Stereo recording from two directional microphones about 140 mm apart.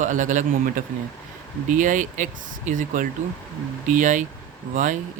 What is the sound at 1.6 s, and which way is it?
Speech, 65° right (ahead or behind).